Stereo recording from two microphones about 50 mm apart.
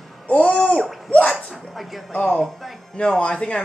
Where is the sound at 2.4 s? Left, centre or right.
Centre.